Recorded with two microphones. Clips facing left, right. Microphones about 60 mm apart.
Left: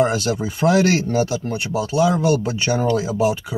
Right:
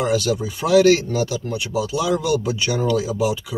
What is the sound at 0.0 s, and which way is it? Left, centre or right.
Speech, left.